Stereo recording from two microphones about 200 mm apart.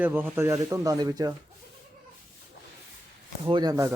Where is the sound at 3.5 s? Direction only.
20° right (ahead or behind).